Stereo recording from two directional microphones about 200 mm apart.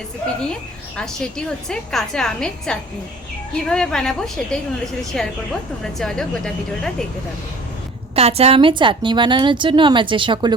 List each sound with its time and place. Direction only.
0.9 s a woman's voice: 5° left (ahead or behind)
8.1 s a woman's voice: 30° right (ahead or behind)